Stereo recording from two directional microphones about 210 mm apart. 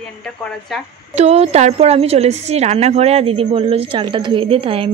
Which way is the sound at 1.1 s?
30° right (ahead or behind).